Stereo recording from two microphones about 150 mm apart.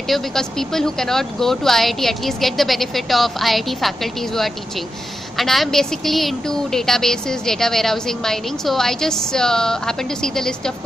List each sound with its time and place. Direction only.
0.1 s a woman's voice: centre (ahead or behind)